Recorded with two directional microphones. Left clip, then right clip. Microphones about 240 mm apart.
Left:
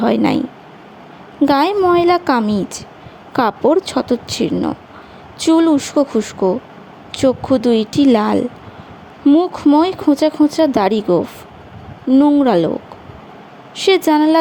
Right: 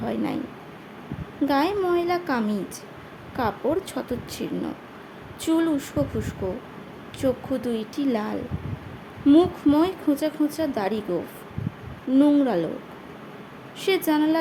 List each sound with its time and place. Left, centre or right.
0.0 s speech: left
1.5 s speech: left
13.7 s speech: left